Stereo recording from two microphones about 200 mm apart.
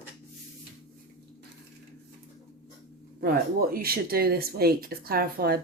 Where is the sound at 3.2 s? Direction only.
50° right (ahead or behind).